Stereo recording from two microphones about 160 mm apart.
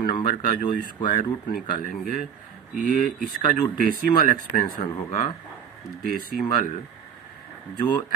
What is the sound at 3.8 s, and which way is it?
Speech, 65° left (ahead or behind).